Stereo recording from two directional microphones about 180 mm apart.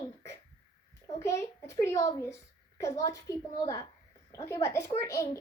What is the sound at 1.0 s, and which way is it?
A child's voice, 15° left (ahead or behind).